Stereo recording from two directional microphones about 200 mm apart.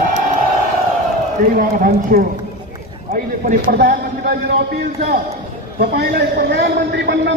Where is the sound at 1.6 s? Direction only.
45° right (ahead or behind).